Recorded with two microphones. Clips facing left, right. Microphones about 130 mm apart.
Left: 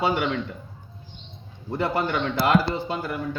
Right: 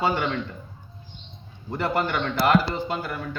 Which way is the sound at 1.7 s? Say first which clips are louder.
Even; 15° left (ahead or behind).